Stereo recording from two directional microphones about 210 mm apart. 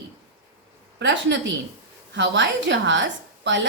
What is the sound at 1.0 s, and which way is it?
A woman's voice, 60° right (ahead or behind).